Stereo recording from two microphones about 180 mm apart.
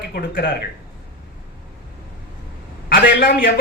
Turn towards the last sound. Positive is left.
turn(degrees=50)  # may be behind; listen again after turning